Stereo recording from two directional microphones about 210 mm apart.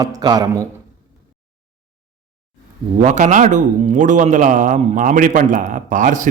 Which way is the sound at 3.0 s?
35° right (ahead or behind).